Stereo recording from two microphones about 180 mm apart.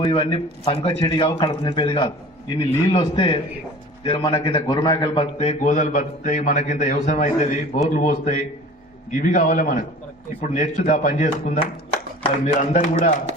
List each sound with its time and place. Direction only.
0.0 s a man's voice: 30° left (ahead or behind); by 13.1 s 45° left (ahead or behind)